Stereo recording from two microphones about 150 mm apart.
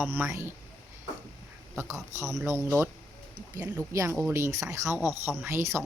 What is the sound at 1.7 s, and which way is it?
Speech, 15° right (ahead or behind).